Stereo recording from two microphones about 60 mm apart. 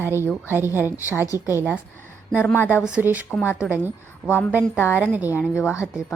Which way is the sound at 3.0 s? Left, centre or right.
Right.